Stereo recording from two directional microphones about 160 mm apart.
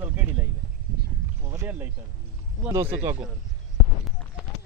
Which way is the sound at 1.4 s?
15° right (ahead or behind).